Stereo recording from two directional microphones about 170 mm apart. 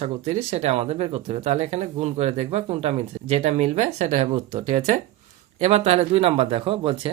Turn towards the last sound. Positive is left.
turn(degrees=-30)  # may be behind; listen again after turning